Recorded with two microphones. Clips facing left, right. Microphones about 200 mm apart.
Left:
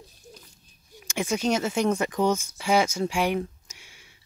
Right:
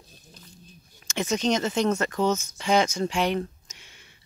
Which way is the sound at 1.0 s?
10° left (ahead or behind).